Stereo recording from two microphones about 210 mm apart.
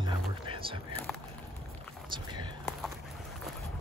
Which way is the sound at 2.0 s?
20° right (ahead or behind).